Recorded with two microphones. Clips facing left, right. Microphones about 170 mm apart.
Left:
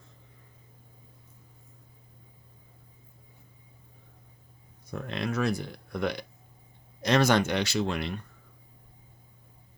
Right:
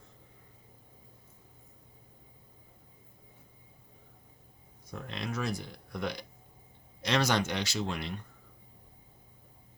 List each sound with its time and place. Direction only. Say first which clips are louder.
4.9 s speech: left 6 dB; 60° left (ahead or behind)
7.0 s speech: left 6 dB; 50° left (ahead or behind); by 8.1 s 70° left (ahead or behind)